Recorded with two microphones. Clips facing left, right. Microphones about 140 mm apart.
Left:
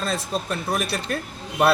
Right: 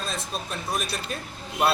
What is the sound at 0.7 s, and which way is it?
Speech, 65° left (ahead or behind).